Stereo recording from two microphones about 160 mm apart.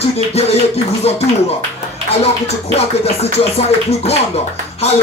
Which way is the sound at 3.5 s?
40° left (ahead or behind).